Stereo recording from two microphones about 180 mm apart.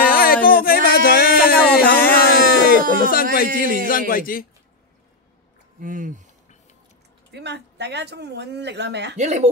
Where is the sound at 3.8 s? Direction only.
50° left (ahead or behind).